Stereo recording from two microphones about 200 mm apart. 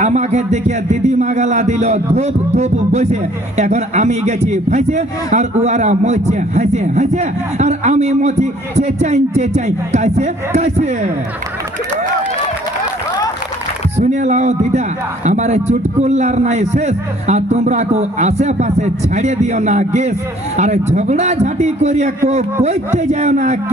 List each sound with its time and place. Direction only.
0.0 s speech: 35° right (ahead or behind)
13.9 s speech: 35° right (ahead or behind)